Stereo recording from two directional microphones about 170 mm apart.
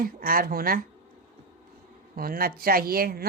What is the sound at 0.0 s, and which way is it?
Speech, 55° right (ahead or behind).